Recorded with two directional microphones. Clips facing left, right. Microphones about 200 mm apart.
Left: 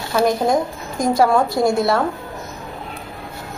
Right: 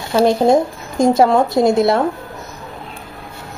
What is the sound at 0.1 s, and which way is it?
Speech, 25° right (ahead or behind).